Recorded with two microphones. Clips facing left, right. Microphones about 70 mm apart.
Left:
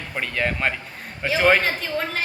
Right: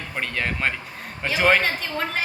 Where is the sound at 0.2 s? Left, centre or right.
Centre.